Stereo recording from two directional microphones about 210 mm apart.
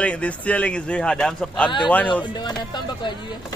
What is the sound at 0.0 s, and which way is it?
Speech, 5° left (ahead or behind).